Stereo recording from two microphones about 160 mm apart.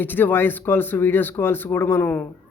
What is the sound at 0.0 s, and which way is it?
Speech, 10° left (ahead or behind).